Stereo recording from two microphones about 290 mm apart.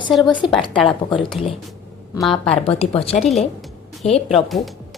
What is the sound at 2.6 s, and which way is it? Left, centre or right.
Speech, centre.